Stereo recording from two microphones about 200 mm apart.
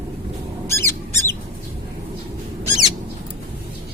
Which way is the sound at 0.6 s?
10° left (ahead or behind).